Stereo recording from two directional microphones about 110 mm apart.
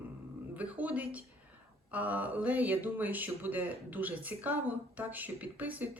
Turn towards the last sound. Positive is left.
turn(degrees=-15)  # may be behind; listen again after turning